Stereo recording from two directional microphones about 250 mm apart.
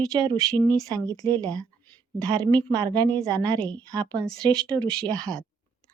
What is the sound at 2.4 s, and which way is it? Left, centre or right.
Speech, centre.